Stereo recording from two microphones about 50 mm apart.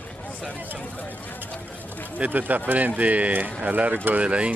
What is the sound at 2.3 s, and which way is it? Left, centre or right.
Speech, right.